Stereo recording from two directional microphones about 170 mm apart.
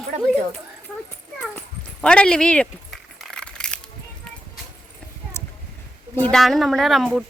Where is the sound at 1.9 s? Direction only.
5° left (ahead or behind).